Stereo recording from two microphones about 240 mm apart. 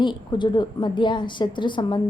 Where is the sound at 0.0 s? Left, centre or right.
Centre.